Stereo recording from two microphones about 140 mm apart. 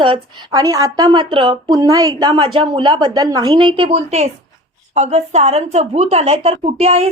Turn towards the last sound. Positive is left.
turn(degrees=-45)  # may be behind; listen again after turning